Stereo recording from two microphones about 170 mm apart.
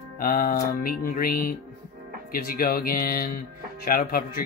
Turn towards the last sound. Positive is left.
turn(degrees=60)  # may be behind; listen again after turning